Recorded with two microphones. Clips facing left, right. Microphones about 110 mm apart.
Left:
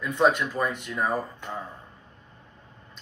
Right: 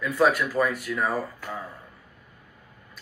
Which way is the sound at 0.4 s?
25° left (ahead or behind).